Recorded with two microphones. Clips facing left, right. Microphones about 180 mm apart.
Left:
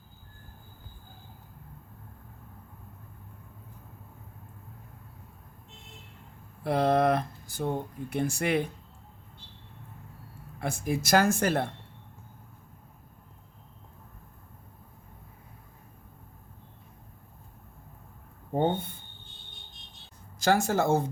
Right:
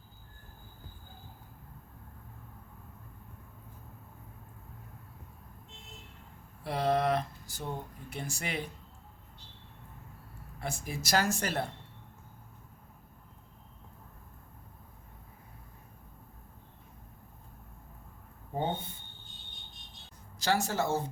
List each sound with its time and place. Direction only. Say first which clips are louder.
6.7 s speech: left 5 dB; 50° left (ahead or behind)
10.6 s speech: left 8 dB; 55° left (ahead or behind)
20.4 s speech: left 5 dB; 50° left (ahead or behind)